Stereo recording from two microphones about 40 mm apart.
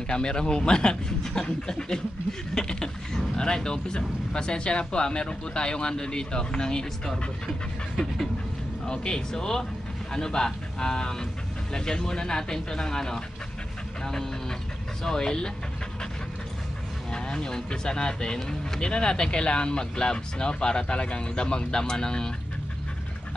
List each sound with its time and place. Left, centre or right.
0.1 s speech: left
15.0 s speech: centre
17.1 s speech: centre